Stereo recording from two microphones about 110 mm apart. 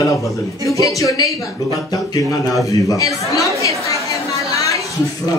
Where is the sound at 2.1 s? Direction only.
35° left (ahead or behind).